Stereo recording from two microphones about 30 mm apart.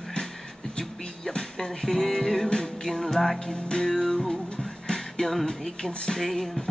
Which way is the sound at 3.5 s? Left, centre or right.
Left.